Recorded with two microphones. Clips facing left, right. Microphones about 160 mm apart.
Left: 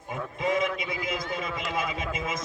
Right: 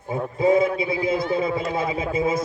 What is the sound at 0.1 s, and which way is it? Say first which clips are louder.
A man's voice: right 9 dB; 30° right (ahead or behind).